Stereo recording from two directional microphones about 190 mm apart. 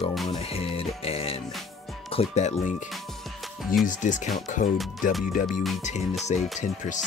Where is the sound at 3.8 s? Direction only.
40° left (ahead or behind).